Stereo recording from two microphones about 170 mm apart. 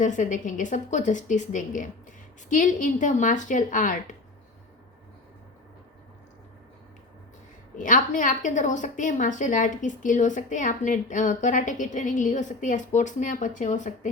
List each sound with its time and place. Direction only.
0.0 s a woman's voice: 45° left (ahead or behind)
7.8 s a woman's voice: 50° left (ahead or behind)